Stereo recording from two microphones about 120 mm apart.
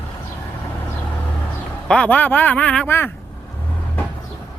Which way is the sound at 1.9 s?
10° left (ahead or behind).